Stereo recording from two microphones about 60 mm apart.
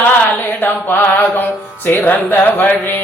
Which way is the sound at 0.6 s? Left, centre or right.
Left.